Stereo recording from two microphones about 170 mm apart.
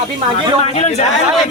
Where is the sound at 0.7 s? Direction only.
40° left (ahead or behind).